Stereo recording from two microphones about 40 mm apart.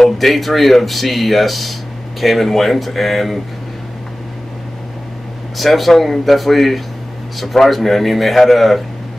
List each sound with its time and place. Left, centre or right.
0.0 s speech: centre
5.6 s speech: centre